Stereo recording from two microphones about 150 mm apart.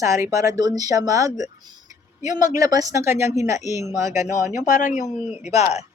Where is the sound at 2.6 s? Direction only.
25° right (ahead or behind).